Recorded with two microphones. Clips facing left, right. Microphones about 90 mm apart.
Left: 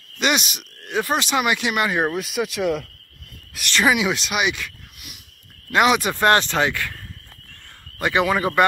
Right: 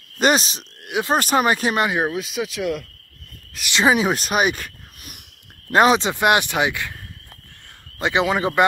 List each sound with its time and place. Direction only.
0.2 s speech: 35° right (ahead or behind)
0.8 s speech: 15° right (ahead or behind)
1.1 s speech: 40° right (ahead or behind)
1.9 s speech: 5° right (ahead or behind)
3.8 s speech: 35° right (ahead or behind)
5.9 s speech: 20° right (ahead or behind)
8.0 s a man's voice: 20° right (ahead or behind)